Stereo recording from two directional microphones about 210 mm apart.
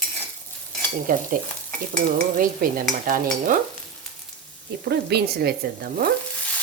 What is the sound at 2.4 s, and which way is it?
Speech, 40° right (ahead or behind).